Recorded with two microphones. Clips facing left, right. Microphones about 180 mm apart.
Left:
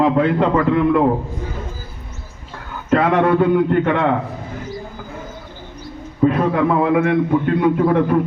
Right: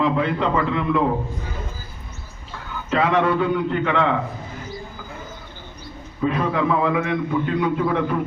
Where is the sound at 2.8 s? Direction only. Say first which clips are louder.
Left 4 dB; 55° left (ahead or behind).